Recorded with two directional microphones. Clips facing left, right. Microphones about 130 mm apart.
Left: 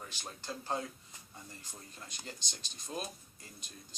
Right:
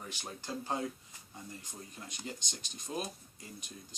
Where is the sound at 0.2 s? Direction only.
15° right (ahead or behind).